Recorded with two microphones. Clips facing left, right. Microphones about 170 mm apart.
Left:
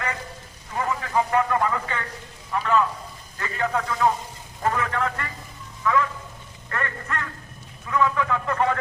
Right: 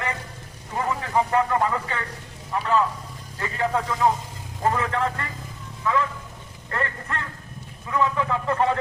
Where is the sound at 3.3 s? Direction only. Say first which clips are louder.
Right 1 dB; 25° right (ahead or behind).